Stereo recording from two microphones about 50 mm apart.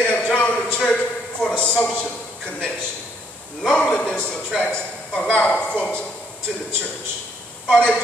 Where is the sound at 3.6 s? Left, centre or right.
Centre.